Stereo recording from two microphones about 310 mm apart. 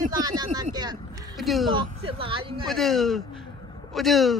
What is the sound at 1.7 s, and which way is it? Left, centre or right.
Speech, centre.